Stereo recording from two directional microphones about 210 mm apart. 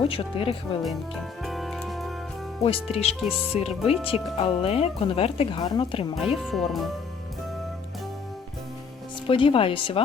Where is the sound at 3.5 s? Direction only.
30° left (ahead or behind).